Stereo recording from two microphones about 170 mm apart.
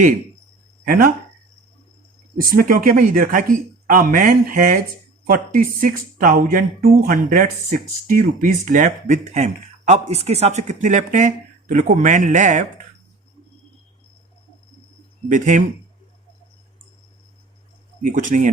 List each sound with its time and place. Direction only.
0.9 s speech: 55° right (ahead or behind)
2.4 s speech: 55° right (ahead or behind)
15.3 s speech: 45° right (ahead or behind)
18.0 s speech: 50° right (ahead or behind)